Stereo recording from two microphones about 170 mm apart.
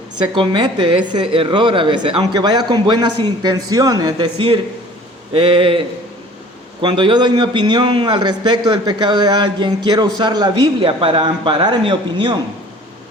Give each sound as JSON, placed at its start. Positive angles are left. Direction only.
{"t": 0.3, "sound": "a man's voice", "side_deg": -30}
{"t": 6.8, "sound": "a man's voice", "side_deg": -25}